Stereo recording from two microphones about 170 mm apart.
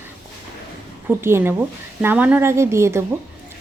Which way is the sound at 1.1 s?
15° right (ahead or behind).